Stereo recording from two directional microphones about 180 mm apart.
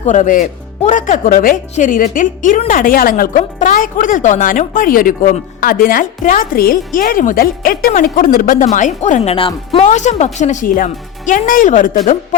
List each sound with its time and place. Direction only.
0.0 s speech: 40° left (ahead or behind)